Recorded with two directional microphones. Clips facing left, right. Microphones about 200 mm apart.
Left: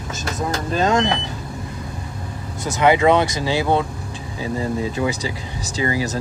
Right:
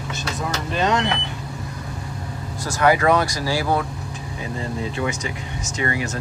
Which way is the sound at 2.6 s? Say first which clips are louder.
Left 2 dB; 20° left (ahead or behind).